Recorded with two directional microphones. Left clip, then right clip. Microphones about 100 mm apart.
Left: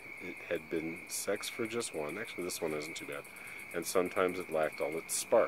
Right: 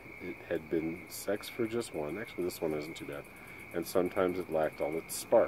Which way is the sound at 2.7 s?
15° left (ahead or behind).